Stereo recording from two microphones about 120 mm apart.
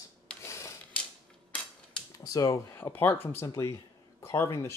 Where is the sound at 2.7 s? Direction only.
15° left (ahead or behind).